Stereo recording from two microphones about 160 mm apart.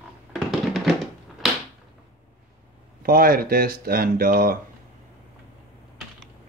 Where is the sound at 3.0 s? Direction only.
65° right (ahead or behind).